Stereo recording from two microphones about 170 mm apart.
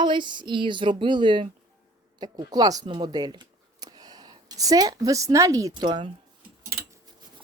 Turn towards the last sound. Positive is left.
turn(degrees=-25)  # may be behind; listen again after turning